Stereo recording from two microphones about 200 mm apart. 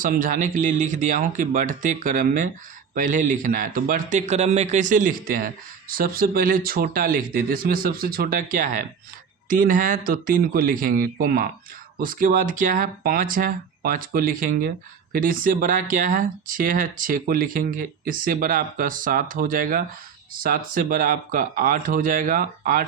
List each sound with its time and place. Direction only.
0.0 s a man's voice: 40° right (ahead or behind)